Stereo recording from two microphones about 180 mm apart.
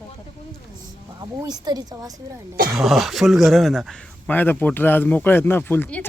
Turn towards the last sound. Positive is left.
turn(degrees=10)  # may be behind; listen again after turning